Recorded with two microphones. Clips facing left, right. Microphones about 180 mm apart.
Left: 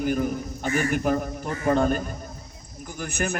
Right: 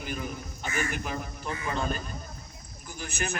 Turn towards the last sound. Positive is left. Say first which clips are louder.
# left 6 dB
turn(degrees=55)  # may be behind; listen again after turning